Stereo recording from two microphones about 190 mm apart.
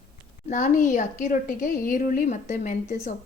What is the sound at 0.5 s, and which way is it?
A woman's voice, 40° left (ahead or behind).